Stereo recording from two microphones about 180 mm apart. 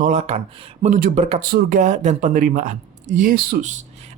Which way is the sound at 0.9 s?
45° right (ahead or behind).